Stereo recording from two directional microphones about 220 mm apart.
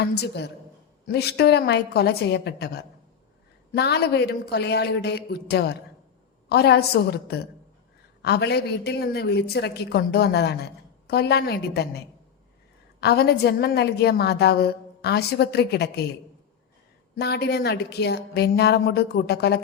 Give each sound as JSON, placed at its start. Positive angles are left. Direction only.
{"t": 0.0, "sound": "a woman's voice", "side_deg": 50}
{"t": 17.2, "sound": "a woman's voice", "side_deg": 50}